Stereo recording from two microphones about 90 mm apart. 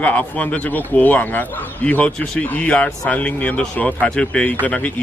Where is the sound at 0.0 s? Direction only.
15° left (ahead or behind).